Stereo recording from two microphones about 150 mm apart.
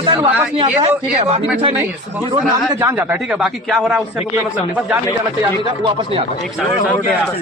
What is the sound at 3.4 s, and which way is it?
Speech, centre (ahead or behind).